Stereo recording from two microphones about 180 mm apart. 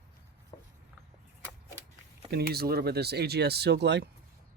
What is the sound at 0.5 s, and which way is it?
Writing, 30° left (ahead or behind).